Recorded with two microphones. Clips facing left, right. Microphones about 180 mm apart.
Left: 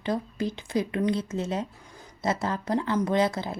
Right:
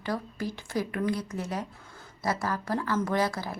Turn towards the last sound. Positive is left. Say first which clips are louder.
# left 3 dB
turn(degrees=20)  # may be behind; listen again after turning